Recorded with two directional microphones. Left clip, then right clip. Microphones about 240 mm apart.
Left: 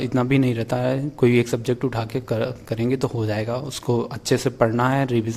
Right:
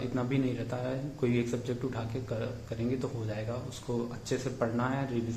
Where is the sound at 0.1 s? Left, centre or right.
Left.